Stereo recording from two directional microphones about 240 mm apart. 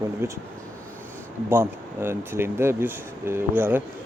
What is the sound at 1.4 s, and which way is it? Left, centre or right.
Speech, centre.